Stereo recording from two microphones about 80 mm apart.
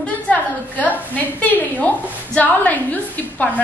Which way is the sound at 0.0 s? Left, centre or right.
Centre.